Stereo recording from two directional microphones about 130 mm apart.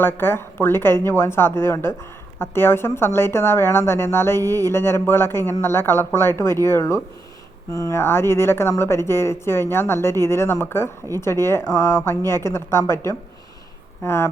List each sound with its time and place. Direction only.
0.0 s a woman's voice: 15° left (ahead or behind)